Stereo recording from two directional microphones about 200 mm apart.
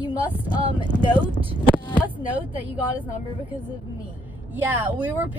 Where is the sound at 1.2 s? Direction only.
25° right (ahead or behind).